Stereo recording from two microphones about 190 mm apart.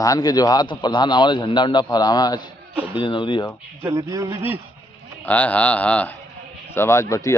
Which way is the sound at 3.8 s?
15° right (ahead or behind).